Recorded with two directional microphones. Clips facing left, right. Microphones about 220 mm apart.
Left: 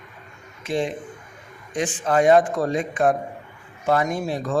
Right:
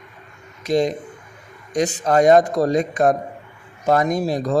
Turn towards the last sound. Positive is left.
turn(degrees=-40)  # may be behind; listen again after turning